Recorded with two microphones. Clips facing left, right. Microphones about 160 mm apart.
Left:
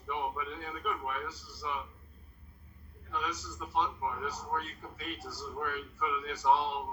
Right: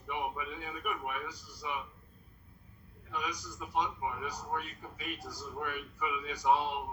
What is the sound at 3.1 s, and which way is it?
A man's voice, 15° right (ahead or behind).